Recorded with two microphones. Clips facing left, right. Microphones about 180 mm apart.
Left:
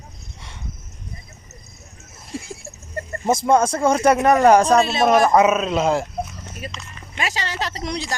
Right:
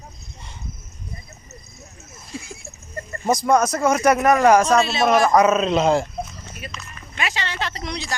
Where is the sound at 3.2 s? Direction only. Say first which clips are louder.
Left 1 dB; 25° left (ahead or behind).